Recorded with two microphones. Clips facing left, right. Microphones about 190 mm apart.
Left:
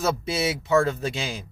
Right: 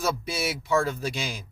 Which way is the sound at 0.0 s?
25° left (ahead or behind).